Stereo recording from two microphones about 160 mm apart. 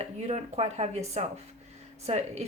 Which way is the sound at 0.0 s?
45° right (ahead or behind).